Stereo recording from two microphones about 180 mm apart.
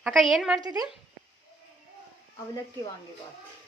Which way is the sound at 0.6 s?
20° right (ahead or behind).